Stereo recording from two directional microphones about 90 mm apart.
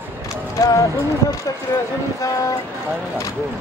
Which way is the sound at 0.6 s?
35° left (ahead or behind).